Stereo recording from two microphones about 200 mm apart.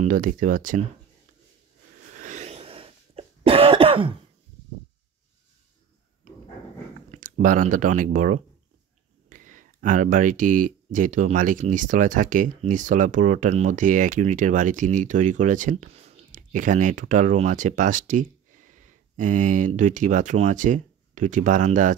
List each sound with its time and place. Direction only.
0.0 s speech: 40° right (ahead or behind)
2.1 s cough: 40° right (ahead or behind)
6.3 s dog: 35° right (ahead or behind)
7.1 s speech: 40° right (ahead or behind)